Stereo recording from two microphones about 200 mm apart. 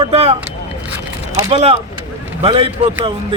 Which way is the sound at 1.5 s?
30° right (ahead or behind).